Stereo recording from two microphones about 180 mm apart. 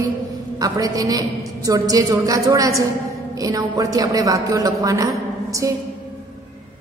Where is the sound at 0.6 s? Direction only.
20° right (ahead or behind).